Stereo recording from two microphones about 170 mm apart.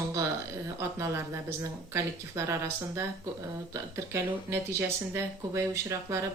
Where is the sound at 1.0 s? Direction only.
15° right (ahead or behind).